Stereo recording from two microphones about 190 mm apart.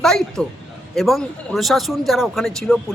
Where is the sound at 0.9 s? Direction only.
Centre (ahead or behind).